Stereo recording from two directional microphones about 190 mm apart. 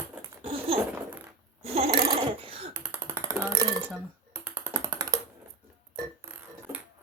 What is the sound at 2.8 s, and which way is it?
Music, 10° right (ahead or behind).